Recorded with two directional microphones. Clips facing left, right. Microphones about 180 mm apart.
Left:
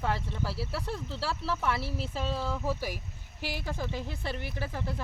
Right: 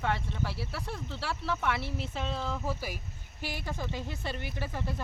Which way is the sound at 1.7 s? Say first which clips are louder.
Left 1 dB; 35° left (ahead or behind).